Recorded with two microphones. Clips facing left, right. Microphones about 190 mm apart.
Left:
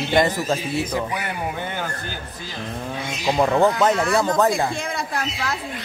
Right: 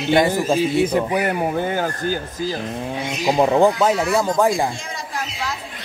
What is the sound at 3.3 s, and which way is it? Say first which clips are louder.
Speech: right 2 dB; 15° right (ahead or behind).